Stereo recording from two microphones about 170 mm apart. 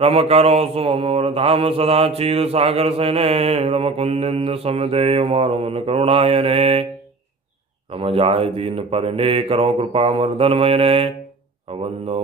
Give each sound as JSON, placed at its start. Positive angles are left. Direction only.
{"t": 0.0, "sound": "mantra", "side_deg": -35}
{"t": 7.9, "sound": "mantra", "side_deg": -35}